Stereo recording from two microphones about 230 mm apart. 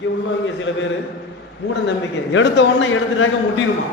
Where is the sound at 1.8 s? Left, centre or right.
Left.